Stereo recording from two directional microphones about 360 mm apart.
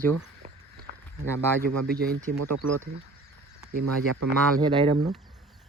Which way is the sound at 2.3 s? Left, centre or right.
Right.